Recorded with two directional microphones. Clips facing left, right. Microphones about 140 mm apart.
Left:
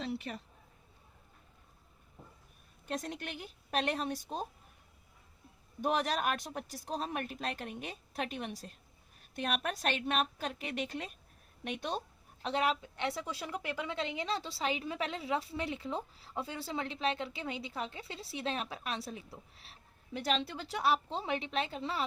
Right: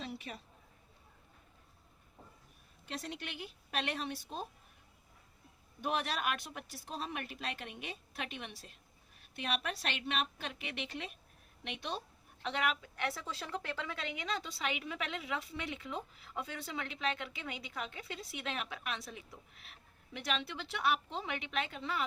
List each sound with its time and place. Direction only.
2.8 s a woman's voice: 45° left (ahead or behind)
5.8 s a woman's voice: 40° left (ahead or behind); by 13.9 s 15° left (ahead or behind)
13.9 s a woman's voice: 25° left (ahead or behind)